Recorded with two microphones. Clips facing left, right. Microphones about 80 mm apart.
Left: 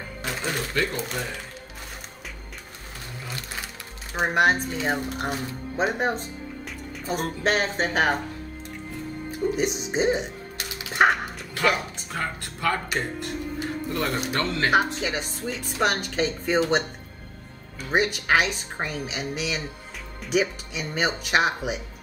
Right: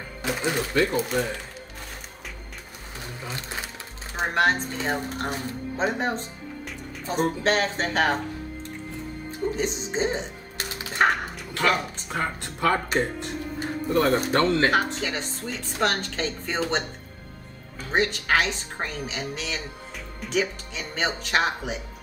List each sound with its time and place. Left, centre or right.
0.2 s speech: centre
4.1 s speech: centre
9.6 s speech: centre
10.9 s dog: centre
12.1 s speech: right
13.9 s speech: right
14.7 s speech: centre
17.9 s speech: centre